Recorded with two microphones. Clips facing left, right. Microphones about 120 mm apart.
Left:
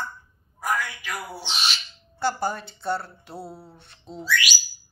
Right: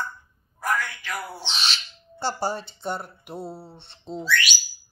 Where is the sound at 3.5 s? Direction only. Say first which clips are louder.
Right 3 dB; 30° right (ahead or behind).